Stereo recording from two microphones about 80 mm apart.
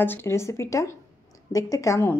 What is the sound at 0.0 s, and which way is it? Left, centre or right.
A woman's voice, left.